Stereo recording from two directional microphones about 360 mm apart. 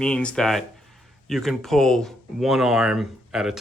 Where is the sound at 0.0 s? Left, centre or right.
Centre.